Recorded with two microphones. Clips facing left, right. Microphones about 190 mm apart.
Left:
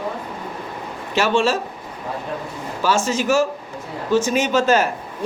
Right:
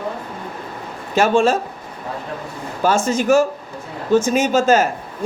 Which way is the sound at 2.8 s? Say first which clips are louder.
Right 3 dB; 50° right (ahead or behind).